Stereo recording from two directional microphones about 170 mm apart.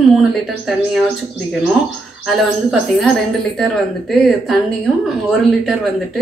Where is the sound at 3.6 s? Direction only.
Centre (ahead or behind).